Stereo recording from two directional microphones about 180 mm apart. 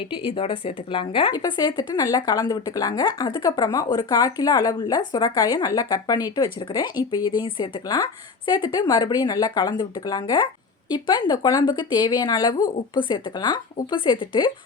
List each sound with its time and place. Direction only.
0.0 s a woman's voice: 30° left (ahead or behind)